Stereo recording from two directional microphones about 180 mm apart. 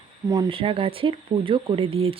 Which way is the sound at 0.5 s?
30° right (ahead or behind).